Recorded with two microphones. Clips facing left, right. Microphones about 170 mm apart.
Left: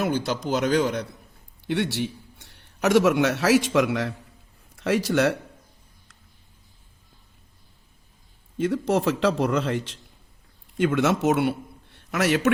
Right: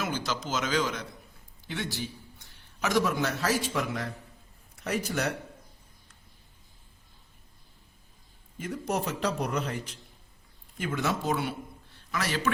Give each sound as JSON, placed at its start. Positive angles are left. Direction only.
{"t": 0.0, "sound": "speech", "side_deg": 60}
{"t": 1.6, "sound": "a man's voice", "side_deg": 70}
{"t": 8.5, "sound": "a man's voice", "side_deg": 85}